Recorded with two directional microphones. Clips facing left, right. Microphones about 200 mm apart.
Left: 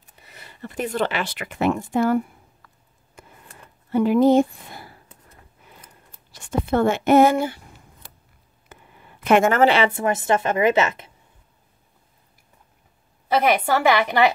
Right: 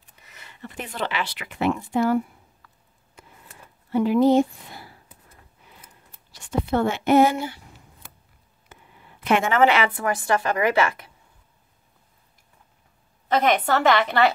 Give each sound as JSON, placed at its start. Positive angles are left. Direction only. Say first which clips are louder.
{"t": 0.2, "sound": "speech", "louder": "left 3 dB", "side_deg": 35}
{"t": 3.9, "sound": "speech", "louder": "left 2 dB", "side_deg": 50}
{"t": 6.3, "sound": "speech", "louder": "left 2 dB", "side_deg": 50}
{"t": 8.7, "sound": "a sound", "louder": "left 3 dB", "side_deg": 50}
{"t": 9.2, "sound": "speech", "louder": "left 3 dB", "side_deg": 45}
{"t": 9.7, "sound": "a woman's voice", "louder": "left 3 dB", "side_deg": 25}
{"t": 13.3, "sound": "a woman's voice", "louder": "left 1 dB", "side_deg": 10}